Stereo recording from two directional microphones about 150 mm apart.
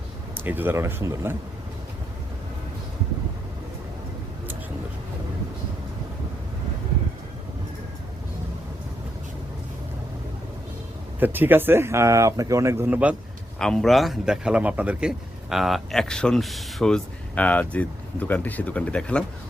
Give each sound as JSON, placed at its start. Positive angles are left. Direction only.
{"t": 0.4, "sound": "speech", "side_deg": -15}
{"t": 11.2, "sound": "speech", "side_deg": -15}
{"t": 13.6, "sound": "a man's voice", "side_deg": 5}